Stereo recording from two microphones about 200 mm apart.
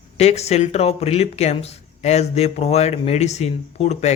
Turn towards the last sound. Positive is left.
turn(degrees=35)  # may be behind; listen again after turning